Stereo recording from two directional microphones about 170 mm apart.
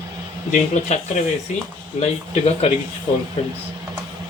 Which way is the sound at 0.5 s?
45° left (ahead or behind).